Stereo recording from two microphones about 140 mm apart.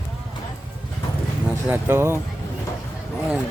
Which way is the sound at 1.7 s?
15° right (ahead or behind).